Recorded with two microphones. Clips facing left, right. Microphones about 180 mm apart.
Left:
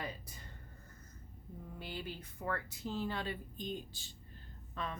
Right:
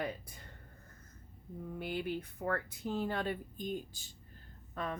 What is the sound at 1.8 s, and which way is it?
Speech, 55° right (ahead or behind).